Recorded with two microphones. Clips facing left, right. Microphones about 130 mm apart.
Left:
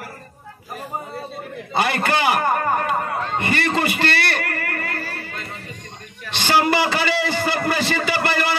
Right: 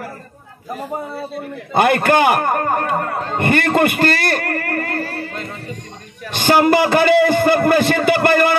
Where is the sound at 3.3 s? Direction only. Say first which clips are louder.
Right 7 dB; 50° right (ahead or behind).